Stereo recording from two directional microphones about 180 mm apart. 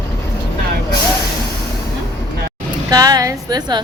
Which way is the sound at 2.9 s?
20° right (ahead or behind).